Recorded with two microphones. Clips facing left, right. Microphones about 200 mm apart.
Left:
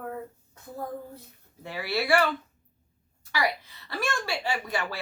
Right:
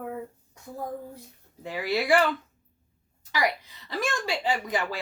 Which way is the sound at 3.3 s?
20° right (ahead or behind).